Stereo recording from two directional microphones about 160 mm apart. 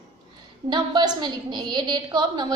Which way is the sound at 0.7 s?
25° right (ahead or behind).